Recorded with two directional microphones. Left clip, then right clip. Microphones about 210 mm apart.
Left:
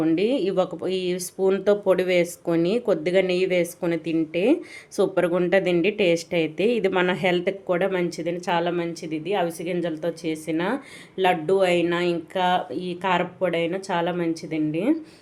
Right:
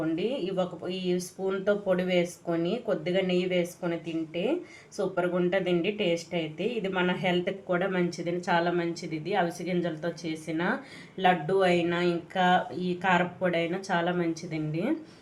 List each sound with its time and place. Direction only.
0.0 s speech: 50° left (ahead or behind); by 14.9 s 35° left (ahead or behind)